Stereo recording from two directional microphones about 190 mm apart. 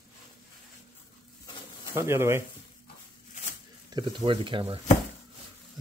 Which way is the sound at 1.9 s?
15° right (ahead or behind).